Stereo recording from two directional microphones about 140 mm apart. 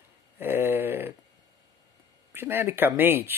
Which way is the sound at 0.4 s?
15° right (ahead or behind).